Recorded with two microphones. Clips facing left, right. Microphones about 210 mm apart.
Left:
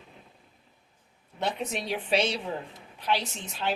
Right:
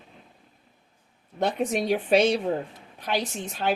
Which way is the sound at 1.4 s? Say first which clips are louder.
Right 6 dB; 50° right (ahead or behind).